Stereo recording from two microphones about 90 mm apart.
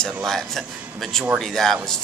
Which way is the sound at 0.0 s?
5° left (ahead or behind).